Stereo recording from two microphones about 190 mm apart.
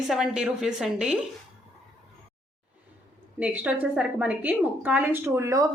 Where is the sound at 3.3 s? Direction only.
5° right (ahead or behind).